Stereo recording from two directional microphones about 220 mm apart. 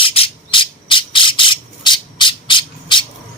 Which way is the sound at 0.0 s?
25° left (ahead or behind).